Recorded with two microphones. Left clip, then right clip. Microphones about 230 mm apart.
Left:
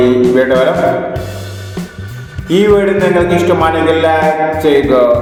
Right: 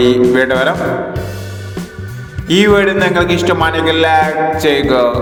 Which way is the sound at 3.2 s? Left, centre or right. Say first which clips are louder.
Left 2 dB; right.